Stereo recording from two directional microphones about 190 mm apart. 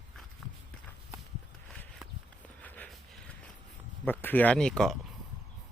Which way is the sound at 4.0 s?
10° left (ahead or behind).